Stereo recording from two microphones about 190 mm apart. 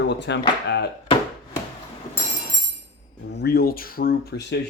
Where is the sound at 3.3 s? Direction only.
55° left (ahead or behind).